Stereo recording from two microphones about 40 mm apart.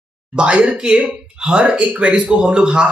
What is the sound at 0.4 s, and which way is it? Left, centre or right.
A man's voice, right.